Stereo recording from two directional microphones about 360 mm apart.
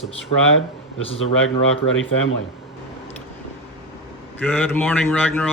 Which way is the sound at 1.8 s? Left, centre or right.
Left.